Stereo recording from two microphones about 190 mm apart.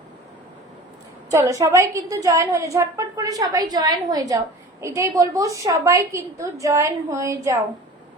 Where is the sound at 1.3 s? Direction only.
15° right (ahead or behind).